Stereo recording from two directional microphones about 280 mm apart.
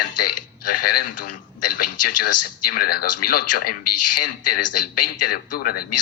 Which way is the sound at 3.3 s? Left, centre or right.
Left.